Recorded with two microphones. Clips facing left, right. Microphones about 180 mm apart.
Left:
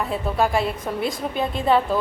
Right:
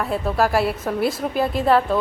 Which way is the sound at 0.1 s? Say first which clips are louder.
Right 3 dB; centre (ahead or behind).